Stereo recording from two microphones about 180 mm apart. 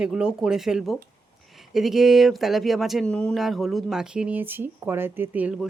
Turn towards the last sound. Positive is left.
turn(degrees=-10)  # may be behind; listen again after turning